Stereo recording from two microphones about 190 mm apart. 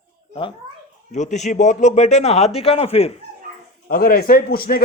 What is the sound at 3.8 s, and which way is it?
Speech, 50° left (ahead or behind).